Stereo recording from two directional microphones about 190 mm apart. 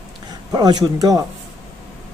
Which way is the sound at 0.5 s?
20° right (ahead or behind).